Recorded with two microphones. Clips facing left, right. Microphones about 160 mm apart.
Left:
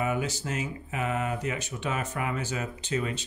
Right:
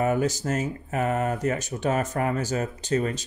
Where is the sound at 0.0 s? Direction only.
45° right (ahead or behind).